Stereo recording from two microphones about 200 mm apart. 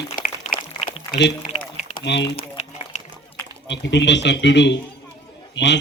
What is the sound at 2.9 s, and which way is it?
Run, 35° left (ahead or behind).